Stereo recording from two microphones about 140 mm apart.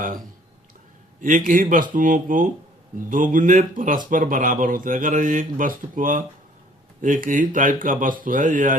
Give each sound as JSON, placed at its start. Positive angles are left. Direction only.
{"t": 1.5, "sound": "speech", "side_deg": -75}